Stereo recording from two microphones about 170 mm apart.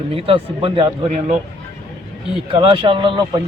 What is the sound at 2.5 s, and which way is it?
Speech, 30° right (ahead or behind).